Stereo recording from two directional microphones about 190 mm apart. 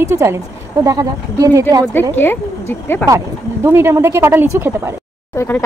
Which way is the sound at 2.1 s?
10° left (ahead or behind).